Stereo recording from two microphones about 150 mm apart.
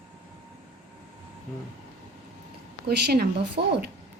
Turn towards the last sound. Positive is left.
turn(degrees=-90)